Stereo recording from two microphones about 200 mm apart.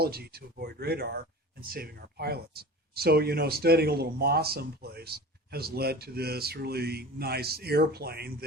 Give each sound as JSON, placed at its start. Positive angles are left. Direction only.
{"t": 0.0, "sound": "speech", "side_deg": -50}